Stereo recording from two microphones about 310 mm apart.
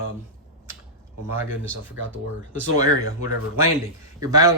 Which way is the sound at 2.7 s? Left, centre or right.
Centre.